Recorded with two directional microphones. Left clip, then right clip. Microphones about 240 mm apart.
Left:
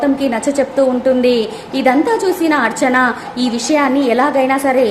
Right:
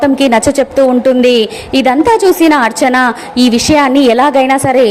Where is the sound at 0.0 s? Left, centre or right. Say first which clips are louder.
Right 7 dB; right.